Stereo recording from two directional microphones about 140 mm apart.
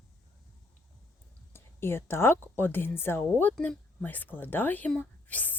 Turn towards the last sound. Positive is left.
turn(degrees=10)  # may be behind; listen again after turning